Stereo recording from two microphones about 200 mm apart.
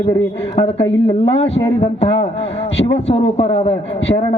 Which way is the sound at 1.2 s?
35° left (ahead or behind).